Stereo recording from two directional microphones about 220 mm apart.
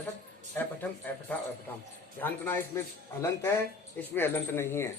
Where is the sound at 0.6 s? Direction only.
10° left (ahead or behind).